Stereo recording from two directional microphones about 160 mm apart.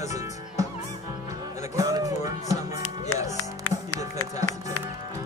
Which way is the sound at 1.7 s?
20° right (ahead or behind).